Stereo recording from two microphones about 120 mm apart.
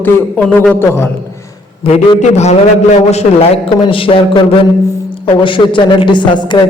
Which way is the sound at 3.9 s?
50° left (ahead or behind).